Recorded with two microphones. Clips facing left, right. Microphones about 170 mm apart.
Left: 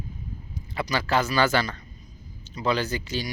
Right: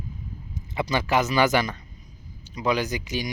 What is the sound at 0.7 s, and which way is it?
Speech, 20° right (ahead or behind).